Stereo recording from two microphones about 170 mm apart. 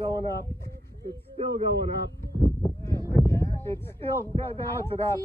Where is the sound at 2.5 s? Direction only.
15° left (ahead or behind).